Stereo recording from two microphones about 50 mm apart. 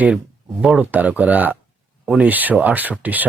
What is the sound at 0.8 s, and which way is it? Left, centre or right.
Speech, right.